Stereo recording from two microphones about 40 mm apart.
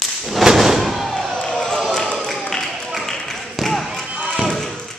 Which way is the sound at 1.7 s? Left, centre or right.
Centre.